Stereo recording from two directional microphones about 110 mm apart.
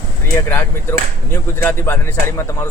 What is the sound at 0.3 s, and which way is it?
Speech, 20° left (ahead or behind).